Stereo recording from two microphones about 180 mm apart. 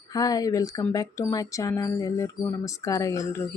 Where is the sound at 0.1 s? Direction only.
20° left (ahead or behind).